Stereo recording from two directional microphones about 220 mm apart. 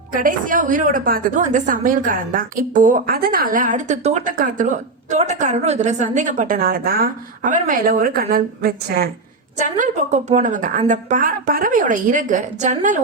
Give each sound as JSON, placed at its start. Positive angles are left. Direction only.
{"t": 0.1, "sound": "a woman's voice", "side_deg": -40}